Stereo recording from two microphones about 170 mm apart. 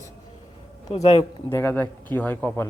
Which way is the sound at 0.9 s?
40° left (ahead or behind).